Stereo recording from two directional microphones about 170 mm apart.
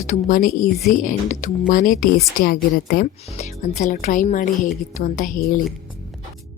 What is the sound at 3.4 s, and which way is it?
A woman's voice, 45° left (ahead or behind).